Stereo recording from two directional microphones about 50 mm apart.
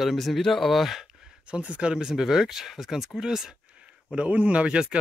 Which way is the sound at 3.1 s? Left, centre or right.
Centre.